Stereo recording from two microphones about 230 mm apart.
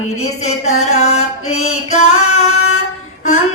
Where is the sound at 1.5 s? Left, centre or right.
Left.